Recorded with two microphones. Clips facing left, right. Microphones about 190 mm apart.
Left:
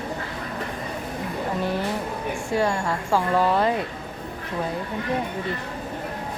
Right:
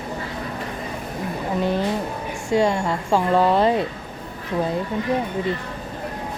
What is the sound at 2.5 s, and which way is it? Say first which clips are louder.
Speech: right 5 dB; 20° right (ahead or behind).